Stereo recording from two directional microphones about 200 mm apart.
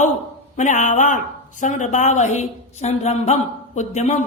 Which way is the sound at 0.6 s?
40° left (ahead or behind).